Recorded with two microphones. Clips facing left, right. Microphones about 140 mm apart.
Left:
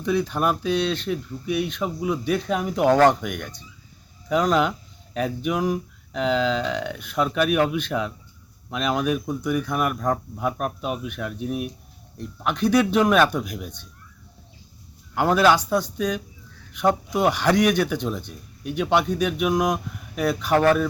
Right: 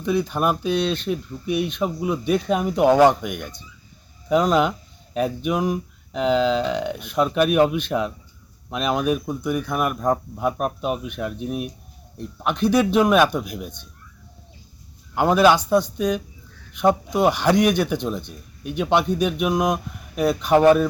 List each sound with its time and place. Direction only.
0.0 s speech: 15° right (ahead or behind)
12.4 s speech: 20° right (ahead or behind)
15.1 s speech: 15° right (ahead or behind)